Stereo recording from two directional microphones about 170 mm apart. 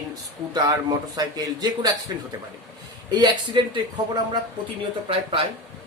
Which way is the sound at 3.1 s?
25° right (ahead or behind).